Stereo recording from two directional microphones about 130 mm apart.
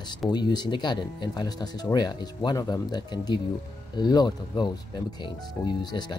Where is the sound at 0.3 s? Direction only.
35° left (ahead or behind).